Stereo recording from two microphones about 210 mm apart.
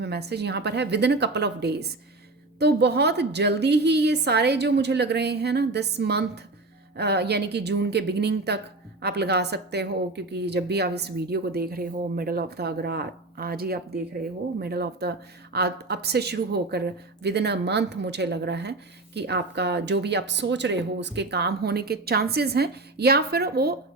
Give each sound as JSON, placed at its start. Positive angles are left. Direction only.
{"t": 0.0, "sound": "a woman's voice", "side_deg": -50}